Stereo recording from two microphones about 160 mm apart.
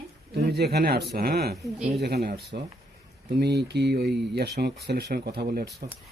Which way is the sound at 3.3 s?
90° right.